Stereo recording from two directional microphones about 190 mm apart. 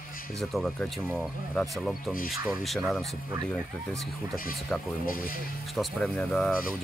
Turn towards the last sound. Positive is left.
turn(degrees=0)  # may be behind; listen again after turning